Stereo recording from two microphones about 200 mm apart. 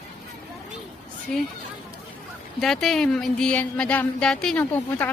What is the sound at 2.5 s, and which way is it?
Speech, centre (ahead or behind).